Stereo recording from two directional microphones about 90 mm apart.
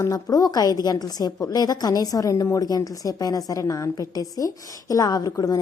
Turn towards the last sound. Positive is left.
turn(degrees=40)  # may be behind; listen again after turning